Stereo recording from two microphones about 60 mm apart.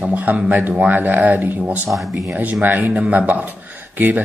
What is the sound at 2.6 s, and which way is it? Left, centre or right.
Speech, right.